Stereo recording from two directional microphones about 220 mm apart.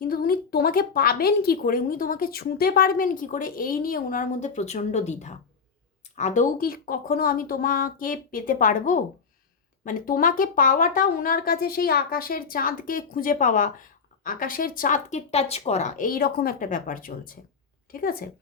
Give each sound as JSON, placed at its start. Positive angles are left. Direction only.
{"t": 0.0, "sound": "a woman's voice", "side_deg": 40}